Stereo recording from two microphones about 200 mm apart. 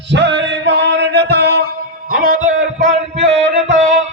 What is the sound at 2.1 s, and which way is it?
Speech, 45° right (ahead or behind).